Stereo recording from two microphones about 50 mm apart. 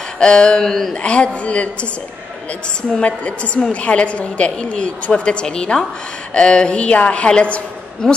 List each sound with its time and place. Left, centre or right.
0.2 s a sound: centre
0.9 s a woman's voice: left
2.9 s a woman's voice: left